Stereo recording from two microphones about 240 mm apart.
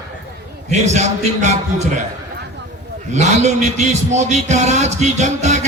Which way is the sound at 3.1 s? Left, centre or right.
Right.